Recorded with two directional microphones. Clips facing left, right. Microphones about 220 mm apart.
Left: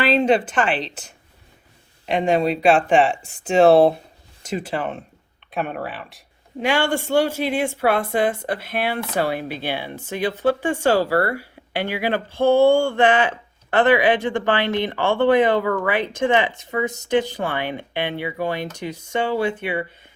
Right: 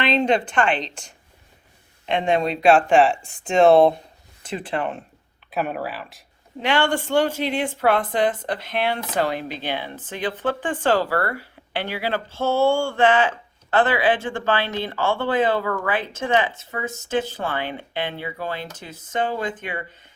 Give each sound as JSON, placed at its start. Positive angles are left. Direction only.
{"t": 0.0, "sound": "speech", "side_deg": 5}
{"t": 2.0, "sound": "speech", "side_deg": 5}